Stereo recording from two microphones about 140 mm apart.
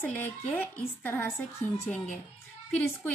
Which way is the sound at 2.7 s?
15° left (ahead or behind).